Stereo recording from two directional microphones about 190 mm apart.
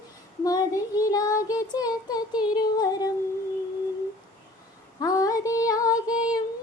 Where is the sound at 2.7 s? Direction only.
20° left (ahead or behind).